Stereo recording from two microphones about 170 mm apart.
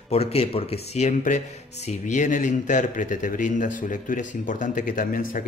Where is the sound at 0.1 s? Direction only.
35° left (ahead or behind).